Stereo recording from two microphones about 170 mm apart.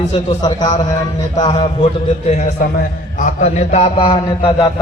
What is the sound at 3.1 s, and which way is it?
A man's voice, 45° left (ahead or behind).